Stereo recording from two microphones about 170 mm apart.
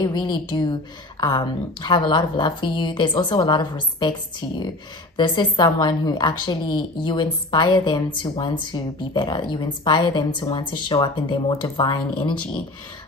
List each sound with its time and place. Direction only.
0.0 s a woman's voice: 25° left (ahead or behind)
5.1 s a woman's voice: 25° left (ahead or behind)